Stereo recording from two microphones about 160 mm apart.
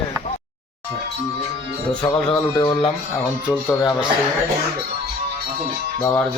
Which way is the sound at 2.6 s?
25° left (ahead or behind).